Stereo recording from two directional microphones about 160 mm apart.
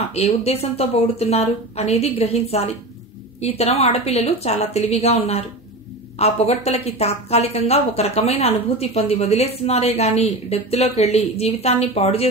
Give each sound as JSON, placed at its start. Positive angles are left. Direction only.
{"t": 0.1, "sound": "a woman's voice", "side_deg": 40}